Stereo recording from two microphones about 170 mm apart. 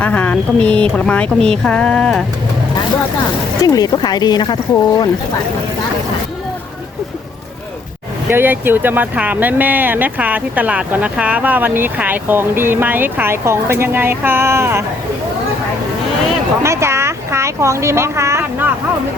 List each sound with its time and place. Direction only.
0.0 s speech: 5° left (ahead or behind)
3.6 s speech: 20° left (ahead or behind)
8.3 s speech: 10° right (ahead or behind)
16.6 s a sound: 15° right (ahead or behind)